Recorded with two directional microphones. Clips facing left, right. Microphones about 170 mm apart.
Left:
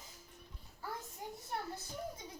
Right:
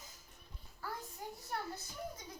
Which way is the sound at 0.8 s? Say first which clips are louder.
Even; 20° left (ahead or behind).